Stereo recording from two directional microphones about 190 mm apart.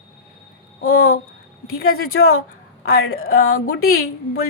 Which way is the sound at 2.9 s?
50° left (ahead or behind).